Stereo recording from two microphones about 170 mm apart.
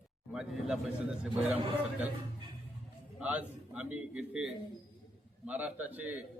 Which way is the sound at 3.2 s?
5° right (ahead or behind).